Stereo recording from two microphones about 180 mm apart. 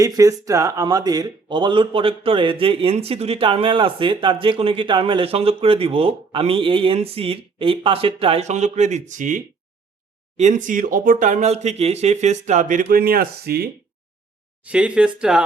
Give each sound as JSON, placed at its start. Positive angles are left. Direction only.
{"t": 0.0, "sound": "speech", "side_deg": -20}
{"t": 14.6, "sound": "speech", "side_deg": -5}